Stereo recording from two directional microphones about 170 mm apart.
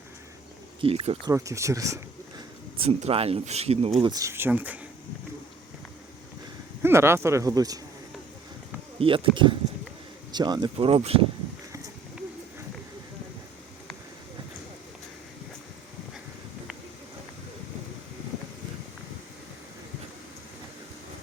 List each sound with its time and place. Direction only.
0.8 s speech: 35° right (ahead or behind)
1.3 s speech: 15° right (ahead or behind)
2.7 s speech: 35° right (ahead or behind)
4.1 s speech: 15° right (ahead or behind)
6.8 s speech: 15° right (ahead or behind)
9.0 s speech: 30° right (ahead or behind)